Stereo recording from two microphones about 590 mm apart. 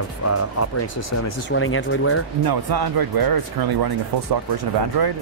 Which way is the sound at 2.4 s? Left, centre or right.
Right.